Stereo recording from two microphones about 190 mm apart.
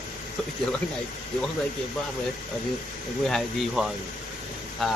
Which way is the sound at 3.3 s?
Centre (ahead or behind).